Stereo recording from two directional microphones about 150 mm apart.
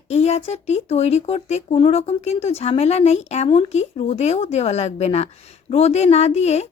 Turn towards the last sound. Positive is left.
turn(degrees=45)  # may be behind; listen again after turning